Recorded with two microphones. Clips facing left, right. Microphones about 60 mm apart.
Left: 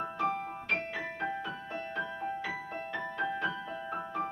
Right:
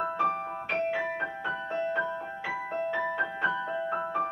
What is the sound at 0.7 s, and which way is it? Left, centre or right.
Music, right.